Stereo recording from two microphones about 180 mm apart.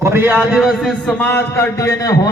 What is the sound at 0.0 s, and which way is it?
A man's voice, 10° right (ahead or behind).